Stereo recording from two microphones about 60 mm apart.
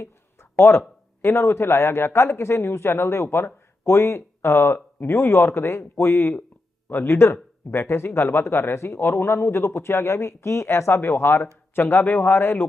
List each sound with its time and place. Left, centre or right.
0.5 s a man's voice: left